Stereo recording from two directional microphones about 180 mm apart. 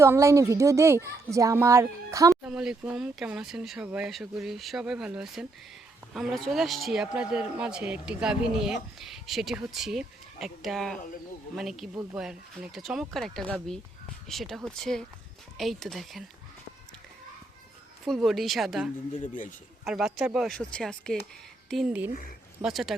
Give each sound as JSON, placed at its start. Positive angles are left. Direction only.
{"t": 0.0, "sound": "a child's voice", "side_deg": -15}
{"t": 2.3, "sound": "a man's voice", "side_deg": -5}
{"t": 18.0, "sound": "a man's voice", "side_deg": 0}
{"t": 22.1, "sound": "speech", "side_deg": 55}
{"t": 22.6, "sound": "a man's voice", "side_deg": 0}